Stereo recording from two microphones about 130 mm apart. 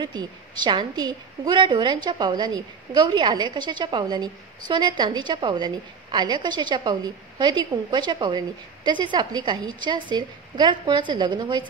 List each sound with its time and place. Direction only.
0.0 s a woman's voice: 35° right (ahead or behind)